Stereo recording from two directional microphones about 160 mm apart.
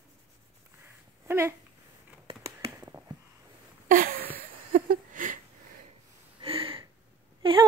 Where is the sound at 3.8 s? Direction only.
60° right (ahead or behind).